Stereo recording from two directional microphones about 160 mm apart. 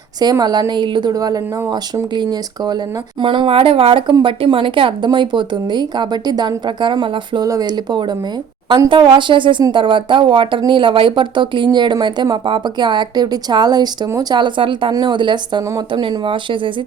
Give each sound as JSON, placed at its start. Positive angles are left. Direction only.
{"t": 0.2, "sound": "a woman's voice", "side_deg": -25}